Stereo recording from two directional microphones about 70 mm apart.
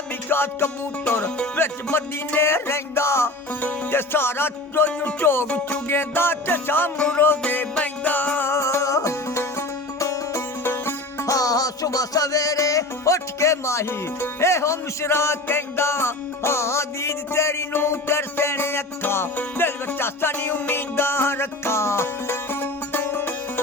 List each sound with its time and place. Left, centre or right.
0.3 s music: left
4.9 s music: left
5.2 s music: left
5.5 s music: centre
5.9 s music: left
7.4 s music: left
8.4 s music: left
10.6 s music: left
11.3 s music: left